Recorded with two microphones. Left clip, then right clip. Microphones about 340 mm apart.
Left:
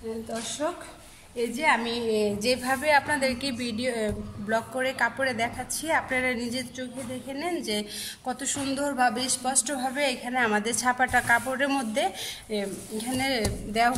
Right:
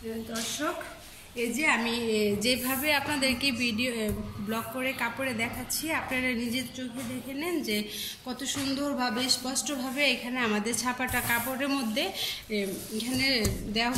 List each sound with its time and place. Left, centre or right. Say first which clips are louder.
1.6 s a woman's voice: left 2 dB; left